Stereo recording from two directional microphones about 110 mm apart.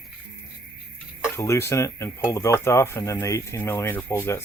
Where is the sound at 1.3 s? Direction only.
25° left (ahead or behind).